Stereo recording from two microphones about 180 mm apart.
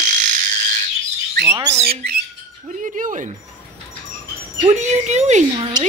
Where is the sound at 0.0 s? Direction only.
45° right (ahead or behind).